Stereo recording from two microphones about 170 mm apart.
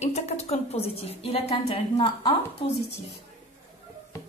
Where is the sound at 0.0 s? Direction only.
40° left (ahead or behind).